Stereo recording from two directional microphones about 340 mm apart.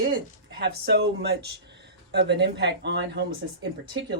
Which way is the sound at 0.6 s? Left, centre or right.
Right.